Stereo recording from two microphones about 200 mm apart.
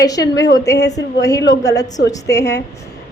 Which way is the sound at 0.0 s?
20° left (ahead or behind).